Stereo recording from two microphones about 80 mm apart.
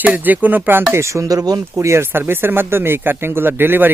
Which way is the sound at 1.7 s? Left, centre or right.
Right.